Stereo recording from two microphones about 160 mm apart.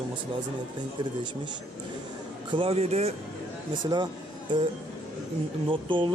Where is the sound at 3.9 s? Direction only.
25° right (ahead or behind).